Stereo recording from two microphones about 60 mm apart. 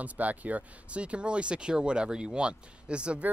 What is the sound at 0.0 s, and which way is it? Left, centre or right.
Speech, right.